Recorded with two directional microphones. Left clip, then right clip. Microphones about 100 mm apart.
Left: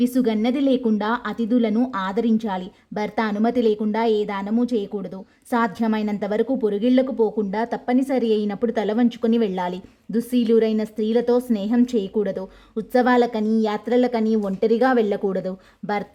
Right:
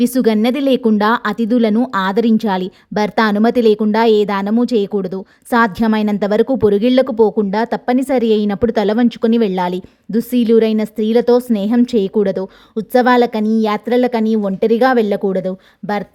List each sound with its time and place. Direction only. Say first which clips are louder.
0.0 s a woman's voice: right 7 dB; 60° right (ahead or behind)
6.5 s a woman's voice: right 9 dB; 60° right (ahead or behind)
6.8 s a woman's voice: right 6 dB; 45° right (ahead or behind)
7.2 s a woman's voice: right 8 dB; 60° right (ahead or behind)
7.5 s a woman's voice: right 6 dB; 45° right (ahead or behind)